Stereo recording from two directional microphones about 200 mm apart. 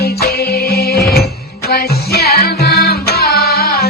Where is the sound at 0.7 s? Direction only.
50° left (ahead or behind).